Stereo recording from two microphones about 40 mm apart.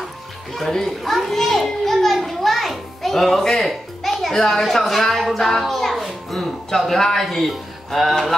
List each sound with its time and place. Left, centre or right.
0.6 s children playing: centre
4.6 s speech: centre
5.5 s a sound: centre
6.8 s speech: centre